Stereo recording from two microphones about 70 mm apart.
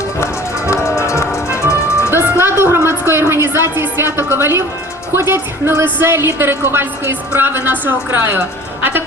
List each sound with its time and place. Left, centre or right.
0.7 s music: left
2.1 s a sound: right
5.1 s a woman's voice: right